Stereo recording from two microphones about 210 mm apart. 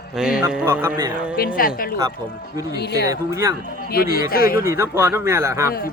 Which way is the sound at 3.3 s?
15° right (ahead or behind).